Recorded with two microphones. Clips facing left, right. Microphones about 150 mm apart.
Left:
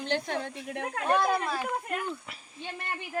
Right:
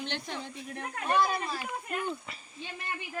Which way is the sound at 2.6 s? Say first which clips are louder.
Left 2 dB; 50° left (ahead or behind).